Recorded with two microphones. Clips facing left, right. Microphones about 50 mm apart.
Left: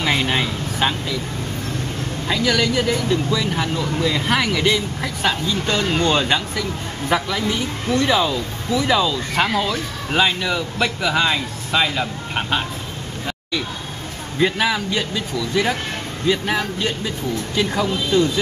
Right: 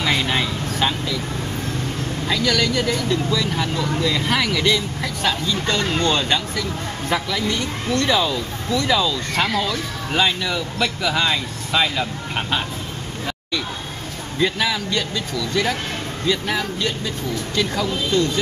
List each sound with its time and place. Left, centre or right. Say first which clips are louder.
0.0 s a sound: left 1 dB; centre
2.2 s speech: left 1 dB; centre
14.4 s speech: left 2 dB; centre